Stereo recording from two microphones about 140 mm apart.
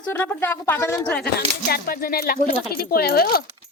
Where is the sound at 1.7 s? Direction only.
90° left.